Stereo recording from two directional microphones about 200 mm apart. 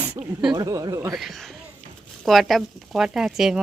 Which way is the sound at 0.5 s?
15° right (ahead or behind).